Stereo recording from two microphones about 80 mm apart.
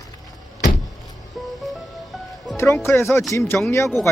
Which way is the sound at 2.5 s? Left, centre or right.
Left.